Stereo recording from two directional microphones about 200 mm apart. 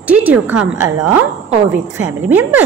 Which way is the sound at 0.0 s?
5° right (ahead or behind).